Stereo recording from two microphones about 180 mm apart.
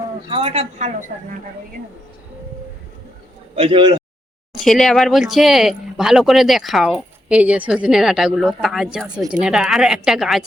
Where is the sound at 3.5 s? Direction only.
30° right (ahead or behind).